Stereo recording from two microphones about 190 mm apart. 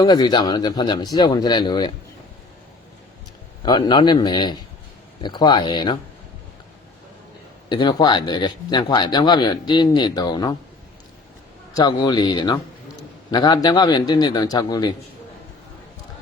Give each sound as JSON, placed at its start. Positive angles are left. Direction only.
{"t": 0.0, "sound": "speech", "side_deg": 20}
{"t": 3.6, "sound": "speech", "side_deg": 25}
{"t": 7.7, "sound": "speech", "side_deg": 20}
{"t": 11.7, "sound": "speech", "side_deg": 25}